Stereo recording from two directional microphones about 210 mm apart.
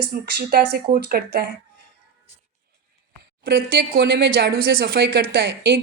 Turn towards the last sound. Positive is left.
turn(degrees=-55)  # may be behind; listen again after turning